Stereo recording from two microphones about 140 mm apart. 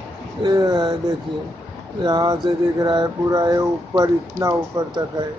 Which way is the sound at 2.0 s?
30° right (ahead or behind).